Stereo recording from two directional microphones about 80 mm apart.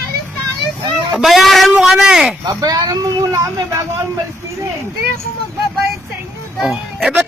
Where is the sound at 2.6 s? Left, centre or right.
Right.